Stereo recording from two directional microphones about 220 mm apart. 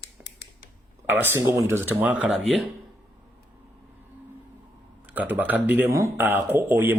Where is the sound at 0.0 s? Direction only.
50° left (ahead or behind).